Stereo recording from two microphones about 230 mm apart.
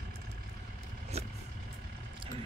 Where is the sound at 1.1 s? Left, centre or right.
Right.